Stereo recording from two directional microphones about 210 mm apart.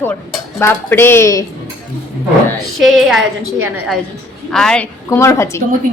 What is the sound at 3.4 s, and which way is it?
Speech, 80° right.